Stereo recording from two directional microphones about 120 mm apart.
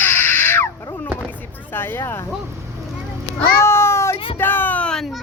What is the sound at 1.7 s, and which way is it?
Speech, 20° left (ahead or behind).